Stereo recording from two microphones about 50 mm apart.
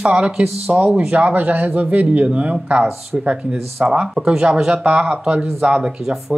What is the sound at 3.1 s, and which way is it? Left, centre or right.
Speech, centre.